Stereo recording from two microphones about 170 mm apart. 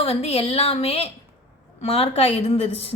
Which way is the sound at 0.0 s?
35° left (ahead or behind).